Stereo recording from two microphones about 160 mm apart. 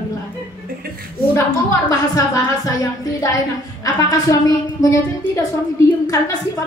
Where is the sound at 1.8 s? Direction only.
20° left (ahead or behind).